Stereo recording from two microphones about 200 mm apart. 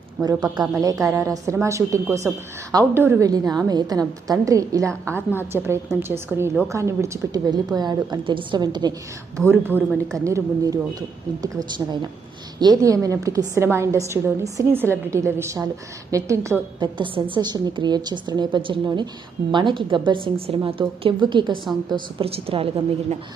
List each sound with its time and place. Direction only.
0.2 s a woman's voice: 20° right (ahead or behind)
9.5 s a woman's voice: 10° right (ahead or behind)
12.5 s a woman's voice: 20° right (ahead or behind)